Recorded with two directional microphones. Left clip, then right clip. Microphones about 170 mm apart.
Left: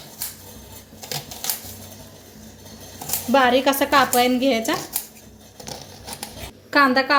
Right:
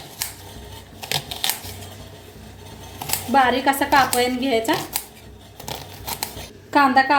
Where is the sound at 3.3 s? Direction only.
35° left (ahead or behind).